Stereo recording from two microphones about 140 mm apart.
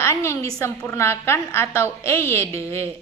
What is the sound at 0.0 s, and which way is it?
A woman's voice, 20° left (ahead or behind).